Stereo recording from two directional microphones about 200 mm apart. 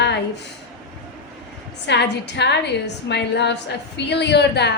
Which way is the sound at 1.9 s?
60° left (ahead or behind).